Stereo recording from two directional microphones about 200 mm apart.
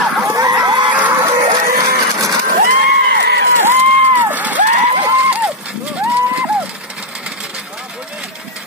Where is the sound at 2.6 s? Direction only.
45° right (ahead or behind).